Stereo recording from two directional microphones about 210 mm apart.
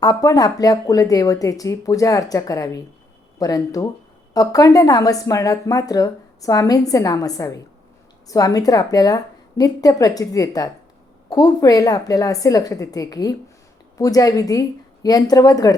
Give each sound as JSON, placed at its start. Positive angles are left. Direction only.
{"t": 0.0, "sound": "speech", "side_deg": 15}